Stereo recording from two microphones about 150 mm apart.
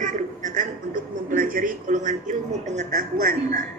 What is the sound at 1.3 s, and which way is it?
A woman's voice, 65° right (ahead or behind).